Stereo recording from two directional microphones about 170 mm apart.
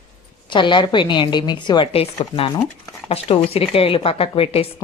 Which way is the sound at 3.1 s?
35° left (ahead or behind).